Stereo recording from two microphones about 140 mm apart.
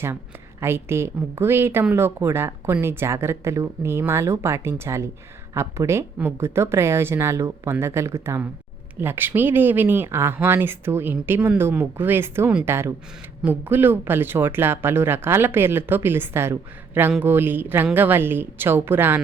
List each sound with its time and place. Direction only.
0.6 s a woman's voice: 20° right (ahead or behind)